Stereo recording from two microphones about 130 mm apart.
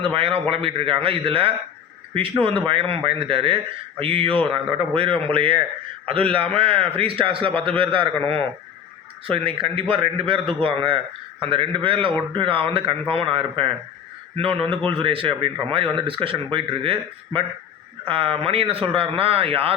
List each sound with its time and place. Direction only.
0.0 s a man's voice: 45° right (ahead or behind)
9.2 s a man's voice: 45° right (ahead or behind)